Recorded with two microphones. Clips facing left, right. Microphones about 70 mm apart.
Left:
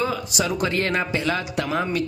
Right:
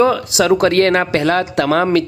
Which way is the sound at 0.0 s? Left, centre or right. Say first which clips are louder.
Right 11 dB; right.